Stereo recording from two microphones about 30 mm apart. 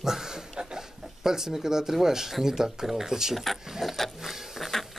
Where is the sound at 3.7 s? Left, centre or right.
Centre.